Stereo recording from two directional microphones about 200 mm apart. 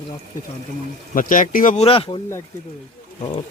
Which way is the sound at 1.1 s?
40° left (ahead or behind).